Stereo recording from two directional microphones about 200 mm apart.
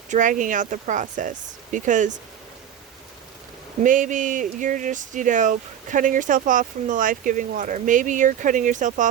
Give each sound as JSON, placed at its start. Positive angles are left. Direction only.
{"t": 0.1, "sound": "speech", "side_deg": -40}
{"t": 3.8, "sound": "speech", "side_deg": -40}